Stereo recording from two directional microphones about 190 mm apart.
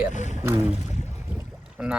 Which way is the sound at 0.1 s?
40° left (ahead or behind).